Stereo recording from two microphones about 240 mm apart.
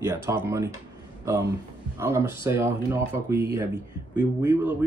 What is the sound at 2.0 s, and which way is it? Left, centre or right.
Speech, centre.